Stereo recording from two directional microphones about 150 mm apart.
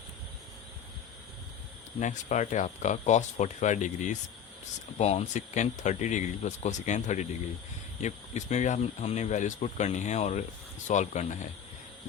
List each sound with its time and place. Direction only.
2.0 s speech: 55° left (ahead or behind)